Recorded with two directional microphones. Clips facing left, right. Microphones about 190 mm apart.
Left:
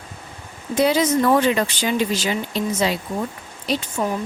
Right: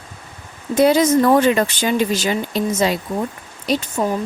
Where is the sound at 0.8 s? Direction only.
45° right (ahead or behind).